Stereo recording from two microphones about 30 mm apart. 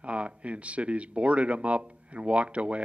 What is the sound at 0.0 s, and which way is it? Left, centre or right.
A man's voice, right.